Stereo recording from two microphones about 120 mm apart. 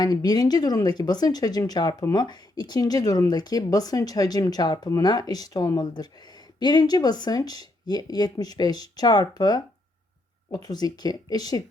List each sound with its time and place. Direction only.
0.0 s speech: 30° left (ahead or behind)